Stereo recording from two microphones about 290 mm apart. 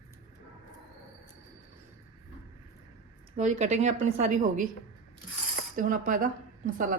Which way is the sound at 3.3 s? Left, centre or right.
Right.